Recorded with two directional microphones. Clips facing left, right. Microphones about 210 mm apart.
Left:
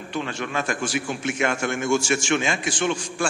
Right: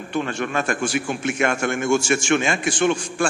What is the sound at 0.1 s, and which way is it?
A man's voice, 50° right (ahead or behind).